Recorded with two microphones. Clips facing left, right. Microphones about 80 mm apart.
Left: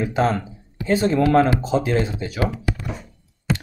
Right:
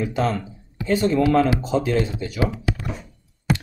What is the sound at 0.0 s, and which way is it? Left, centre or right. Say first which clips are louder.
Speech: left 2 dB; left.